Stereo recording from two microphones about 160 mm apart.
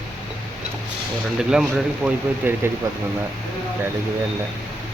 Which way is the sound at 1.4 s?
5° right (ahead or behind).